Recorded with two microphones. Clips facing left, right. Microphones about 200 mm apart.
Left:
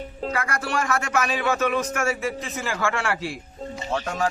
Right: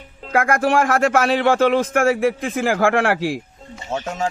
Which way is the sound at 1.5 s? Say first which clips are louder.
Right 7 dB; 90° right.